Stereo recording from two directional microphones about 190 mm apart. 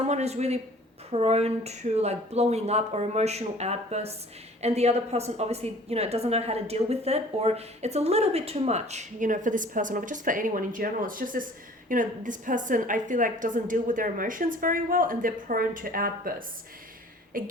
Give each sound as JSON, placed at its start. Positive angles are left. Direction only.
{"t": 0.1, "sound": "a woman's voice", "side_deg": -35}
{"t": 17.3, "sound": "a woman's voice", "side_deg": -50}